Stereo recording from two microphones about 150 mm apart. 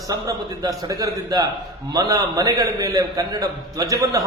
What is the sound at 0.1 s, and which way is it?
A man's voice, 25° right (ahead or behind).